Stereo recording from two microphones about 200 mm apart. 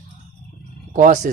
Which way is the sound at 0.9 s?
40° right (ahead or behind).